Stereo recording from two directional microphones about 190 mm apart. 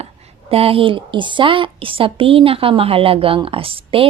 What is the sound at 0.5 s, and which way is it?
A woman's voice, 30° right (ahead or behind).